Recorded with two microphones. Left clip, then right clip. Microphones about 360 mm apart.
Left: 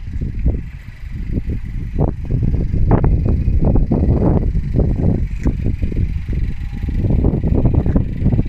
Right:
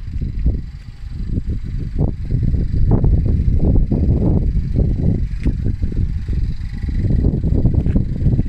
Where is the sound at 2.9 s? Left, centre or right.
Left.